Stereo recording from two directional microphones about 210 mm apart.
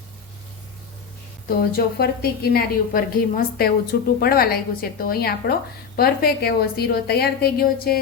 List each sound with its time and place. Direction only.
1.5 s a woman's voice: 45° left (ahead or behind)